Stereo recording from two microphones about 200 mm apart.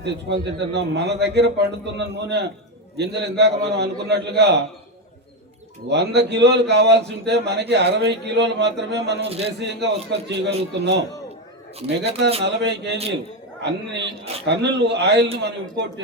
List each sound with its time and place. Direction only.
0.0 s a man's voice: 55° right (ahead or behind)
5.9 s a man's voice: 60° right (ahead or behind)
11.8 s speech: 30° right (ahead or behind)
12.5 s a man's voice: 60° right (ahead or behind)